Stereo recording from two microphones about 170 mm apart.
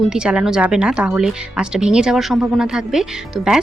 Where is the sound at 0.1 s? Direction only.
5° right (ahead or behind).